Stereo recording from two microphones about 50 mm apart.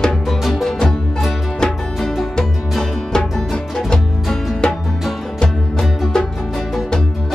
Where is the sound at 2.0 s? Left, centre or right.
Centre.